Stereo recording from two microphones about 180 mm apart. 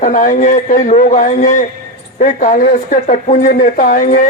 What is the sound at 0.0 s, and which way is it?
A man's voice, 45° left (ahead or behind).